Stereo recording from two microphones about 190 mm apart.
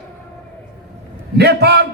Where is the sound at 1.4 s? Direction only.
60° right (ahead or behind).